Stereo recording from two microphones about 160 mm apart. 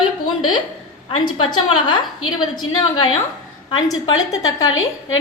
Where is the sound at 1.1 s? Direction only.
30° left (ahead or behind).